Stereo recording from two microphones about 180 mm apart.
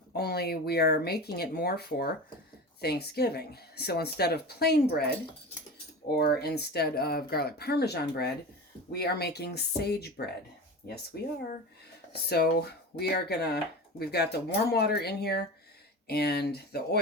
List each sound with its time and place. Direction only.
0.1 s a woman's voice: 60° left (ahead or behind)
12.3 s a woman's voice: 65° left (ahead or behind)